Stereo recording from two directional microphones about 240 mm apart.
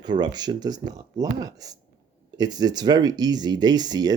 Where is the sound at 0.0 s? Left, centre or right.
Centre.